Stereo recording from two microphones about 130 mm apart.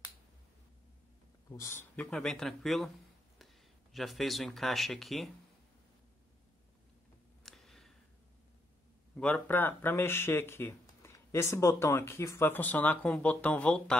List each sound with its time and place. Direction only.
1.5 s speech: 20° left (ahead or behind)
2.0 s speech: 5° left (ahead or behind)
3.9 s speech: centre (ahead or behind)
7.4 s a sound: centre (ahead or behind)
9.1 s speech: 10° left (ahead or behind)